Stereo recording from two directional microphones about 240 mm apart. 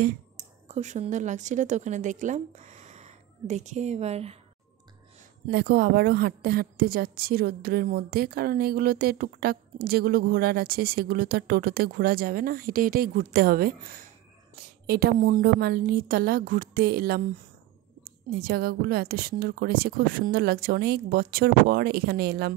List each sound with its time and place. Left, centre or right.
0.7 s a woman's voice: right
5.5 s a woman's voice: right
18.4 s a woman's voice: right